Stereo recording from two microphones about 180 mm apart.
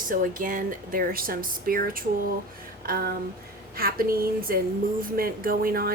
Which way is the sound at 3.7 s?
55° right (ahead or behind).